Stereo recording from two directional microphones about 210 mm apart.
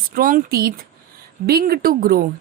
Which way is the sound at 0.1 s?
45° right (ahead or behind).